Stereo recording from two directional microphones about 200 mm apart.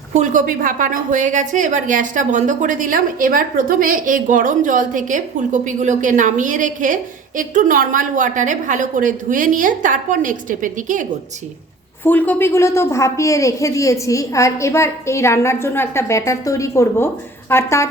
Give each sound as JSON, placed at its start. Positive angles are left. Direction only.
{"t": 0.1, "sound": "a woman's voice", "side_deg": -40}
{"t": 12.0, "sound": "a woman's voice", "side_deg": 10}